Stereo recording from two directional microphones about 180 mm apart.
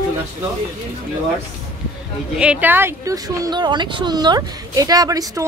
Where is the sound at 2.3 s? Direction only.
5° right (ahead or behind).